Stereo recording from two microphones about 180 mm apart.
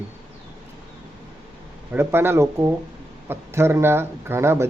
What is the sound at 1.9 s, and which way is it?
Speech, 10° right (ahead or behind).